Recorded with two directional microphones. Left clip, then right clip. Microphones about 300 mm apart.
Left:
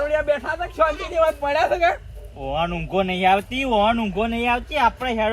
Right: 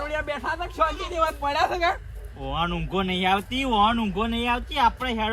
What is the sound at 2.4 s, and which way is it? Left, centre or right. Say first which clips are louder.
Speech: left 3 dB; centre.